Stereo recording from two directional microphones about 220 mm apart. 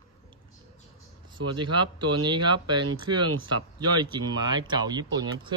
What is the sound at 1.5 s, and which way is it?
Speech, 20° right (ahead or behind).